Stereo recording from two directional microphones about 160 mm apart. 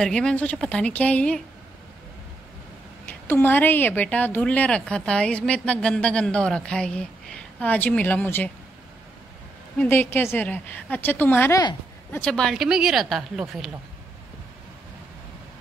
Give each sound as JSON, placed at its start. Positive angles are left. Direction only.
{"t": 0.0, "sound": "a woman's voice", "side_deg": 5}
{"t": 3.1, "sound": "a woman's voice", "side_deg": 10}
{"t": 9.8, "sound": "a woman's voice", "side_deg": 15}